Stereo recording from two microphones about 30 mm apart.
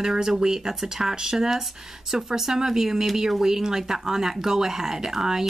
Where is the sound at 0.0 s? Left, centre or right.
Centre.